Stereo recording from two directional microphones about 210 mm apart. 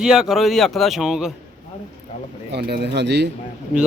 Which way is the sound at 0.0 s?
5° right (ahead or behind).